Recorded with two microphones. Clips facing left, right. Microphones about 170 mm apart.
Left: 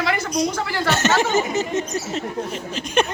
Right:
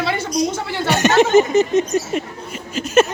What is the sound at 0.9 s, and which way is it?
Speech, 15° right (ahead or behind).